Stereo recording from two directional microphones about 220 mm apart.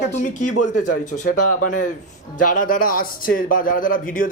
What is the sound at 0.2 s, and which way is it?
Speech, 35° left (ahead or behind).